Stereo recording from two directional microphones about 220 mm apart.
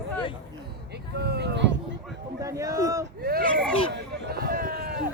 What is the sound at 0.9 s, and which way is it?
Speech, 50° right (ahead or behind).